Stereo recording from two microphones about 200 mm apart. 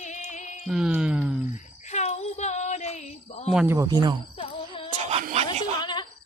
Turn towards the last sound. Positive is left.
turn(degrees=20)  # may be behind; listen again after turning